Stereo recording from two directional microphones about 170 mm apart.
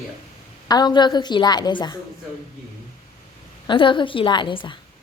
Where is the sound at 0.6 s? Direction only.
25° left (ahead or behind).